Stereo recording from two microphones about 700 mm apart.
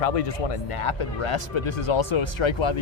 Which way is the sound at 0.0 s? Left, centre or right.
Left.